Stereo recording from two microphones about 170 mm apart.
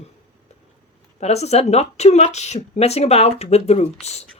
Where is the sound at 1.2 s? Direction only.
40° left (ahead or behind).